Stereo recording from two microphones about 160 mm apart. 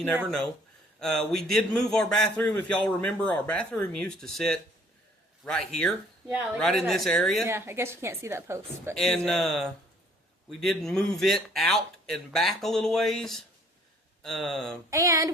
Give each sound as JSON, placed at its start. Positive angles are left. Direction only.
{"t": 0.9, "sound": "a man's voice", "side_deg": 5}
{"t": 7.4, "sound": "a woman's voice", "side_deg": -15}
{"t": 9.0, "sound": "a man's voice", "side_deg": 5}
{"t": 14.8, "sound": "a sound", "side_deg": -20}